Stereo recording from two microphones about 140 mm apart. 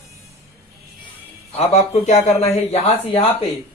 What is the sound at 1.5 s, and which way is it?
Speech, 45° left (ahead or behind).